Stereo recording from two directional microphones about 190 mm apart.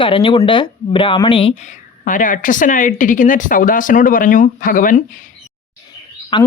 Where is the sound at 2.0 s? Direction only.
45° left (ahead or behind).